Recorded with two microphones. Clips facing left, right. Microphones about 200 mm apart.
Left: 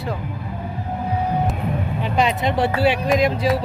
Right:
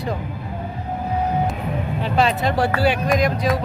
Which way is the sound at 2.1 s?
20° left (ahead or behind).